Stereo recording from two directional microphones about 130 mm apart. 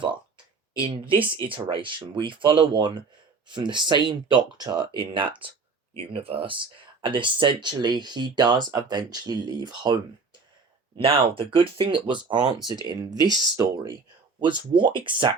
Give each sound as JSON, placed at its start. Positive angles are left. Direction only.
{"t": 0.8, "sound": "speech", "side_deg": -40}
{"t": 10.9, "sound": "speech", "side_deg": -45}